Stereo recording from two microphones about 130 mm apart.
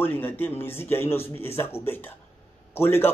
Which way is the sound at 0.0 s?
15° left (ahead or behind).